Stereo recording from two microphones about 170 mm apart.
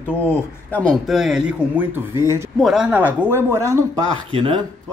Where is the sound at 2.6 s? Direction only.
5° right (ahead or behind).